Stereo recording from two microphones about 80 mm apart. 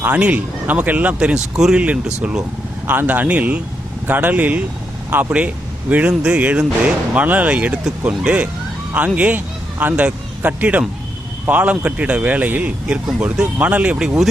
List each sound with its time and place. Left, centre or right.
0.0 s speech: centre
2.8 s speech: right; by 14.3 s centre